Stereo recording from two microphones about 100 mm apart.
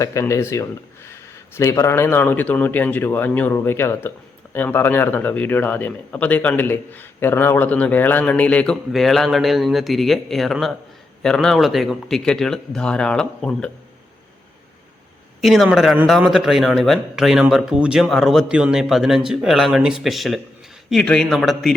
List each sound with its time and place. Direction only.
0.0 s a man's voice: 30° left (ahead or behind); by 13.7 s 10° left (ahead or behind)
15.4 s speech: centre (ahead or behind)
18.4 s speech: 10° right (ahead or behind)